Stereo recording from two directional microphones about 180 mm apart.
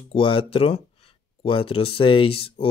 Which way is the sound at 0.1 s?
30° left (ahead or behind).